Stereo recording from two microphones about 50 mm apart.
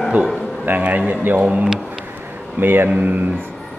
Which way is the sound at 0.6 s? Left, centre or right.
Right.